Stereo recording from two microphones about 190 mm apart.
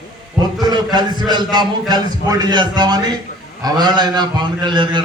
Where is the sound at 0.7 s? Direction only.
25° right (ahead or behind).